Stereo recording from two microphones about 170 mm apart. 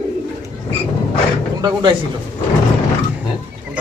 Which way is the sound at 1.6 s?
25° right (ahead or behind).